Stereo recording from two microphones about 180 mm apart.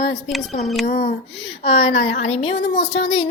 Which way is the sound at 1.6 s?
35° left (ahead or behind).